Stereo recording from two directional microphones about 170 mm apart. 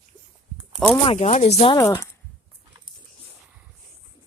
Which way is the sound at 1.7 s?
15° left (ahead or behind).